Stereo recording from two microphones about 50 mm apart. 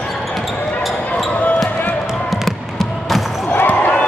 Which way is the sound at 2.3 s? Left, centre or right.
Centre.